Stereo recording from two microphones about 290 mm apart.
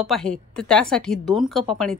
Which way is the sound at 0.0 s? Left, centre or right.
Centre.